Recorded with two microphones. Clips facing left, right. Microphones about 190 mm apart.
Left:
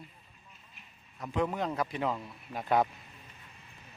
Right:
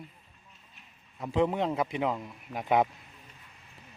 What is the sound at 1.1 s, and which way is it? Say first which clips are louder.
A man's voice: right 4 dB; 25° right (ahead or behind).